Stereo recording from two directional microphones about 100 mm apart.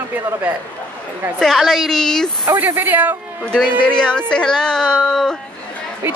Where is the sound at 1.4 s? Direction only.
Centre (ahead or behind).